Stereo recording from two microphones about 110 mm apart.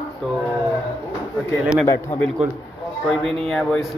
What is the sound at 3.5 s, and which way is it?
Speech, 5° left (ahead or behind).